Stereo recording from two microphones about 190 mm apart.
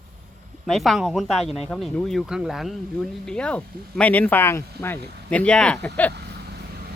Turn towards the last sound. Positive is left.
turn(degrees=5)  # may be behind; listen again after turning